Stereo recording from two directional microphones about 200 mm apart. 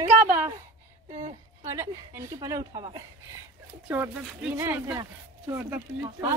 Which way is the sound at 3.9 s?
10° right (ahead or behind).